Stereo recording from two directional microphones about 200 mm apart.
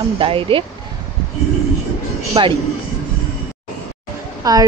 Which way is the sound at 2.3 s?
25° right (ahead or behind).